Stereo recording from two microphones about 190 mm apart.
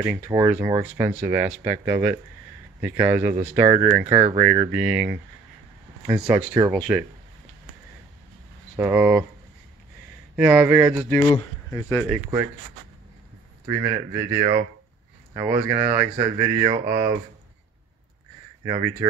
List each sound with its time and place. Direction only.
0.0 s speech: 10° right (ahead or behind)
8.7 s speech: 10° right (ahead or behind)
10.3 s speech: 10° right (ahead or behind)
11.1 s speech: 15° left (ahead or behind)
13.7 s speech: 15° right (ahead or behind)
15.6 s speech: 15° right (ahead or behind)
18.7 s speech: 20° right (ahead or behind)